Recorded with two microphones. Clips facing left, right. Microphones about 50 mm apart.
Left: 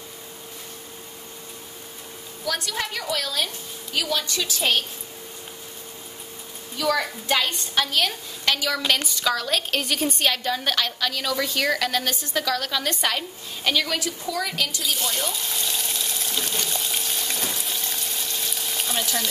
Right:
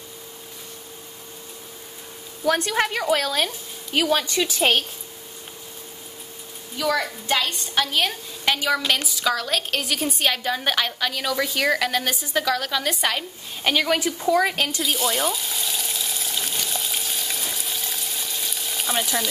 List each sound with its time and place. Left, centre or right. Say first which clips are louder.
2.4 s a woman's voice: right 7 dB; right
6.8 s a woman's voice: even; centre
7.9 s a woman's voice: right 1 dB; centre
13.7 s a woman's voice: right 3 dB; right
14.8 s water: right 4 dB; centre